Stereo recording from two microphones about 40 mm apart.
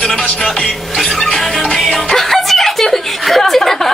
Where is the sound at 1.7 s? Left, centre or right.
Centre.